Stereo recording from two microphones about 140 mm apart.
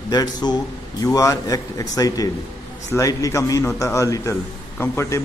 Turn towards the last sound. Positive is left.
turn(degrees=20)  # may be behind; listen again after turning